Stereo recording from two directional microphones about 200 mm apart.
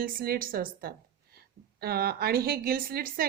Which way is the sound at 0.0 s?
45° right (ahead or behind).